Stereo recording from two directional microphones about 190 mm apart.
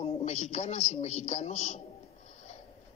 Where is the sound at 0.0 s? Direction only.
35° left (ahead or behind).